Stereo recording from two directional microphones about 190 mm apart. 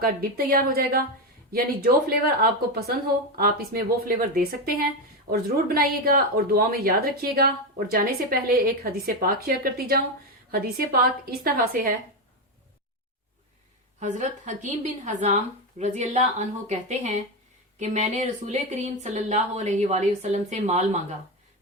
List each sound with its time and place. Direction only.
0.0 s speech: 50° right (ahead or behind)
14.0 s speech: 40° right (ahead or behind)